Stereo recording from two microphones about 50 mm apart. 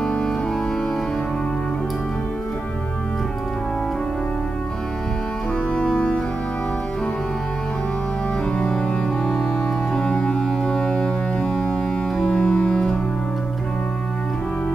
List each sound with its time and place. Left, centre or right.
0.0 s music: centre
5.8 s music: left
9.9 s music: centre